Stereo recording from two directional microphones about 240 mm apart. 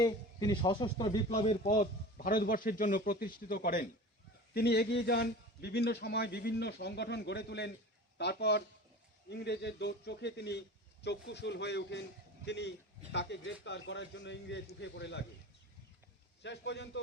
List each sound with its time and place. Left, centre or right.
0.0 s a man's voice: centre; by 15.2 s left
16.4 s a man's voice: left